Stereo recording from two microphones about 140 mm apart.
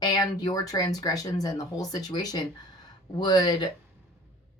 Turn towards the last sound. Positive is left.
turn(degrees=30)  # may be behind; listen again after turning